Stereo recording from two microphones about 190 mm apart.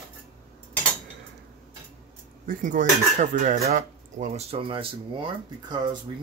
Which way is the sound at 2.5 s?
40° right (ahead or behind).